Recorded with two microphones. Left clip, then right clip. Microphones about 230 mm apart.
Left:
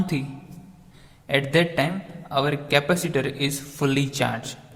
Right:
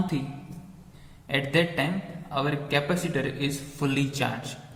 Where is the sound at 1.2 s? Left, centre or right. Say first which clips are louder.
Left 4 dB; left.